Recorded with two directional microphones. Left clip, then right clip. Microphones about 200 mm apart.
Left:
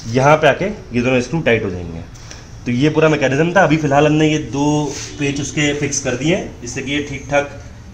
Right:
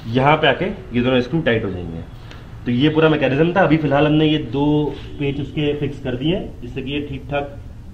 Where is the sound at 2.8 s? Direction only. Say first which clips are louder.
Left 2 dB; 40° left (ahead or behind).